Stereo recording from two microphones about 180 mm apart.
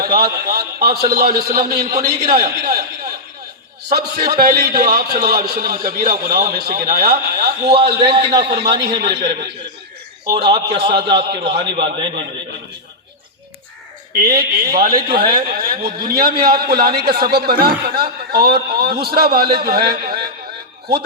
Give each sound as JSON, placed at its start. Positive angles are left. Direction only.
{"t": 0.0, "sound": "a man's voice", "side_deg": -55}
{"t": 4.3, "sound": "a man's voice", "side_deg": -55}
{"t": 7.9, "sound": "a man's voice", "side_deg": -30}
{"t": 9.0, "sound": "a man's voice", "side_deg": -70}
{"t": 10.2, "sound": "a man's voice", "side_deg": -25}
{"t": 14.2, "sound": "a man's voice", "side_deg": -60}